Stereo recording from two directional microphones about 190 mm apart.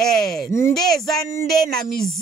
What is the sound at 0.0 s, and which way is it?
Speech, centre (ahead or behind).